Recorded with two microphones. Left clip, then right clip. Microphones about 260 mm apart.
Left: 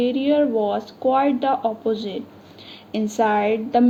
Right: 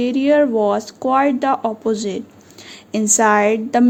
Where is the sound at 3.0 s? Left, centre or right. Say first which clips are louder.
Right 5 dB; right.